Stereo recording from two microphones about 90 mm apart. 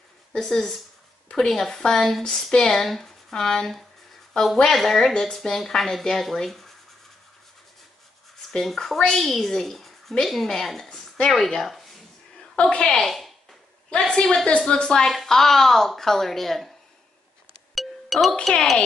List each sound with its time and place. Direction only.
0.3 s a woman's voice: 5° left (ahead or behind)
8.5 s a woman's voice: 5° left (ahead or behind)
17.7 s music: centre (ahead or behind)
18.3 s speech: 10° left (ahead or behind)